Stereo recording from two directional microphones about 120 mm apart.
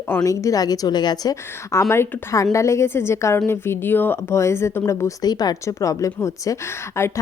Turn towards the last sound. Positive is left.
turn(degrees=20)  # may be behind; listen again after turning